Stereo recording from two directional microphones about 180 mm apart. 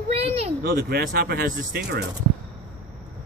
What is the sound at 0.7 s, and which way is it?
Speech, 55° right (ahead or behind).